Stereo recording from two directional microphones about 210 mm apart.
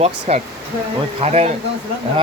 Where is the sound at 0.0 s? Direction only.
30° right (ahead or behind).